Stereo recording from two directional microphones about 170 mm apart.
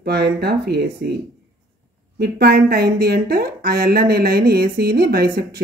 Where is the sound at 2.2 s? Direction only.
65° right (ahead or behind).